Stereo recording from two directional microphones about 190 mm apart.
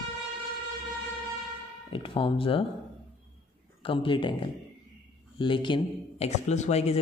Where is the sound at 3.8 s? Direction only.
25° left (ahead or behind).